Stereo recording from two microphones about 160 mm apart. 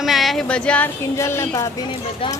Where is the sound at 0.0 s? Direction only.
Centre (ahead or behind).